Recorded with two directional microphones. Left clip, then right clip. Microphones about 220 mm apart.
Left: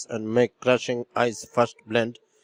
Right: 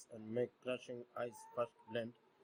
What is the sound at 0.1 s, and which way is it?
Speech, 40° left (ahead or behind).